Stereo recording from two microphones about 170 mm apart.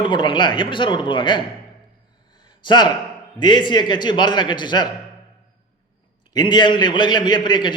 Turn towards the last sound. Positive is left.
turn(degrees=25)  # may be behind; listen again after turning